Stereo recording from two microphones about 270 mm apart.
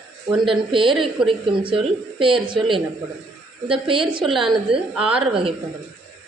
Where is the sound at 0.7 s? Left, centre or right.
Centre.